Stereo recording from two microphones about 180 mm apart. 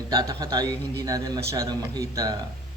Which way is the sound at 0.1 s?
20° right (ahead or behind).